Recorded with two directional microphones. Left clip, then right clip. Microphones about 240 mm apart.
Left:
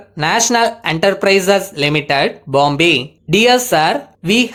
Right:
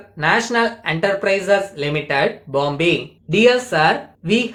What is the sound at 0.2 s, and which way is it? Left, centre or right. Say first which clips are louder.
Speech: left 3 dB; left.